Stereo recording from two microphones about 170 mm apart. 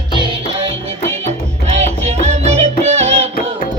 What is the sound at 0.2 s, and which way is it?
Music, 30° right (ahead or behind).